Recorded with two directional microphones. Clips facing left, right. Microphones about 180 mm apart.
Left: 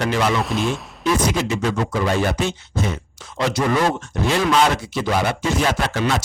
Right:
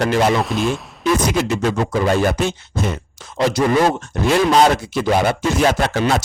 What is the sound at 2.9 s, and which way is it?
Speech, 40° right (ahead or behind).